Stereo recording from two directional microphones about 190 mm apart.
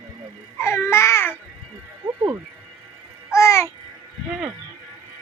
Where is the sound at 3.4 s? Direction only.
15° left (ahead or behind).